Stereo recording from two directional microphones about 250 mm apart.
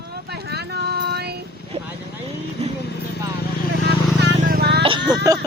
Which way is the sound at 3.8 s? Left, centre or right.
Right.